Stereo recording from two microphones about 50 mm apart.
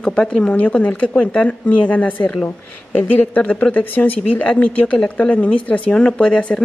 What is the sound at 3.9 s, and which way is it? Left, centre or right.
Speech, left.